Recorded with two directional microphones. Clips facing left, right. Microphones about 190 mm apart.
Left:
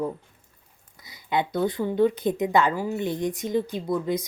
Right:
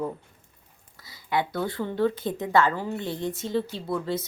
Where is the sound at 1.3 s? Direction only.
20° left (ahead or behind).